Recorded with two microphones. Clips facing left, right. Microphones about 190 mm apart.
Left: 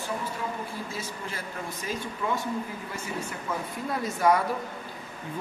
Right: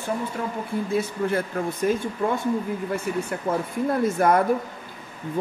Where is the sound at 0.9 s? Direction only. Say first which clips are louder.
Right 13 dB; 60° right (ahead or behind).